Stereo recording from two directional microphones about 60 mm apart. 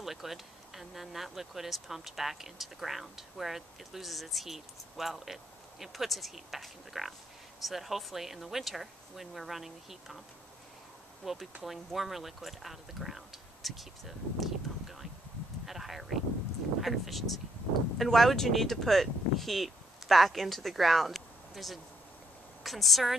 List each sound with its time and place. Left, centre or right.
0.0 s speech: centre
11.2 s speech: centre
15.6 s a sound: centre
16.8 s speech: centre